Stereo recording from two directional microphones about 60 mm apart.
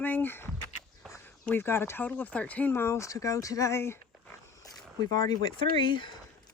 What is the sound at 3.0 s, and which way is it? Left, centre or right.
Speech, left.